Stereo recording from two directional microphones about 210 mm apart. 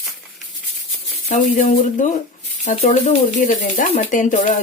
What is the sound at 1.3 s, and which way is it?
Speech, 35° left (ahead or behind).